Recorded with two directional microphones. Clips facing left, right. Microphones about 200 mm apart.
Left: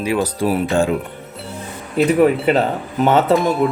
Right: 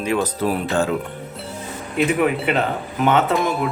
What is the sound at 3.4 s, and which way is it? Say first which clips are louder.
Speech: left 4 dB; centre (ahead or behind).